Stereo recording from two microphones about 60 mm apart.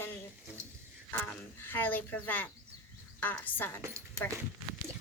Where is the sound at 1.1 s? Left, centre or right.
Left.